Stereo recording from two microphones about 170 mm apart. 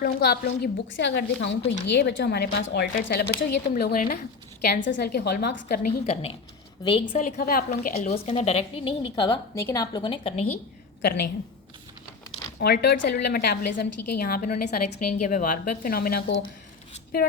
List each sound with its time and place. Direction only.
0.0 s a woman's voice: 65° left (ahead or behind)
4.6 s a woman's voice: 80° left
6.8 s a woman's voice: 30° left (ahead or behind)
7.2 s a woman's voice: 55° left (ahead or behind)
7.9 s a woman's voice: 40° left (ahead or behind)
11.0 s a woman's voice: 75° left (ahead or behind)
12.5 s a woman's voice: 75° left (ahead or behind)